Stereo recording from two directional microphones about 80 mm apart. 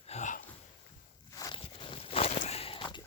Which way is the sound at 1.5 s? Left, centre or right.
Left.